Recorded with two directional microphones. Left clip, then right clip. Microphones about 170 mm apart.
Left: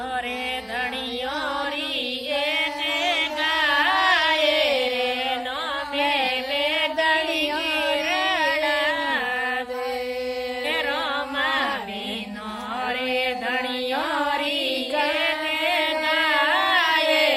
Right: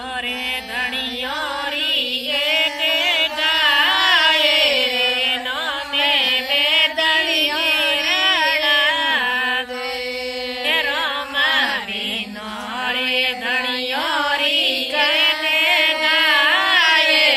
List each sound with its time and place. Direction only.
2.5 s music: centre (ahead or behind)
6.7 s music: centre (ahead or behind)
7.9 s music: centre (ahead or behind)
10.7 s music: 5° right (ahead or behind)
13.1 s mantra: 5° right (ahead or behind)
14.6 s a sound: 40° left (ahead or behind)
15.6 s music: centre (ahead or behind)